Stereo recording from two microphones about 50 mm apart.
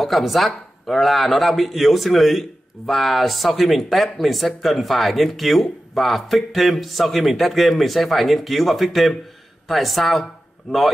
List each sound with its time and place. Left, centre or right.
0.0 s speech: centre